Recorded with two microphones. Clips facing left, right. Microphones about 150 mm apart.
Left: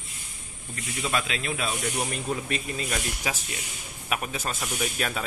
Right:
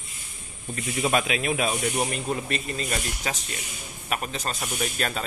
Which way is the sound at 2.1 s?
Centre (ahead or behind).